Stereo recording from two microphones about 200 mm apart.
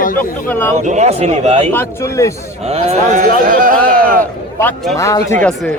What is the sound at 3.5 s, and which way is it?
Speech, 45° right (ahead or behind).